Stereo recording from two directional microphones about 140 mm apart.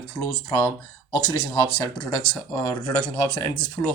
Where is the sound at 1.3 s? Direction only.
25° left (ahead or behind).